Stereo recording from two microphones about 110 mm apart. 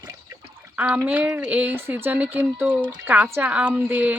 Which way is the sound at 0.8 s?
15° right (ahead or behind).